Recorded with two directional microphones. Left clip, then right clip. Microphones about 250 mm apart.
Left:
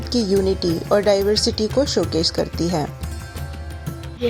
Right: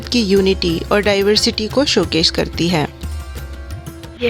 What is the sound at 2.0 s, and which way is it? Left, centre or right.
Speech, right.